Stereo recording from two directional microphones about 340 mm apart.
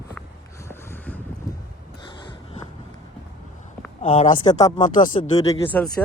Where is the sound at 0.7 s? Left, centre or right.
Centre.